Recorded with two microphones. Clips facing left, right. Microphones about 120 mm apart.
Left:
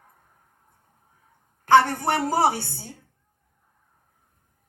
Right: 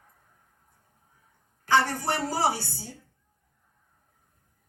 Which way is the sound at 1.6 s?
55° left (ahead or behind).